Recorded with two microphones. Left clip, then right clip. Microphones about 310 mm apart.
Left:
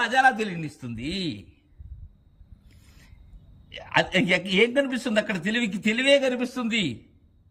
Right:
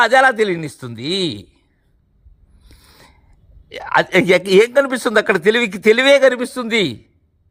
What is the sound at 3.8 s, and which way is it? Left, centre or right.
Mantra, centre.